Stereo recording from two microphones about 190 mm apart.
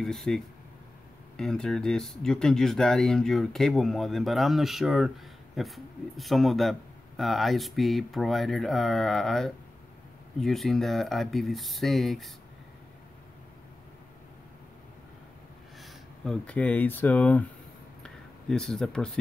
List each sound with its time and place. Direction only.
0.0 s speech: centre (ahead or behind)
15.8 s speech: 5° left (ahead or behind)
18.0 s a sound: 5° left (ahead or behind)